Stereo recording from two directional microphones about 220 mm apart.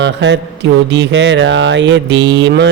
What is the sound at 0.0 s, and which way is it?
Speech, 55° right (ahead or behind).